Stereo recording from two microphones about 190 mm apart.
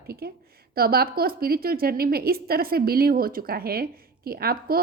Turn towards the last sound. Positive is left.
turn(degrees=-50)  # may be behind; listen again after turning